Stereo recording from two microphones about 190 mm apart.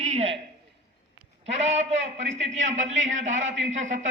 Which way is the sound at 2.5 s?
40° right (ahead or behind).